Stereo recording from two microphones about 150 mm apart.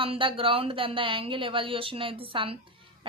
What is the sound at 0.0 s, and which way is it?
A woman's voice, 35° right (ahead or behind).